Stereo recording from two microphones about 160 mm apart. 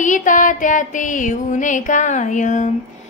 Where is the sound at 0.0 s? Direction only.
55° left (ahead or behind).